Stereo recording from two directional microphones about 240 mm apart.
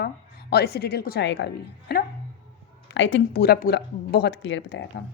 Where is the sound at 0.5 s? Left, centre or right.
Left.